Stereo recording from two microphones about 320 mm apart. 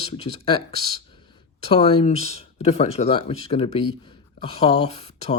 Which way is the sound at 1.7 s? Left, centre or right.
Centre.